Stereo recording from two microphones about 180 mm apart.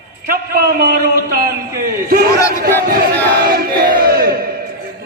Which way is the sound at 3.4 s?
55° right (ahead or behind).